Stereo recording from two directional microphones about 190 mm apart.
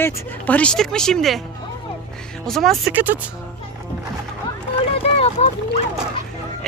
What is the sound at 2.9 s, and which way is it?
Speech, 10° right (ahead or behind).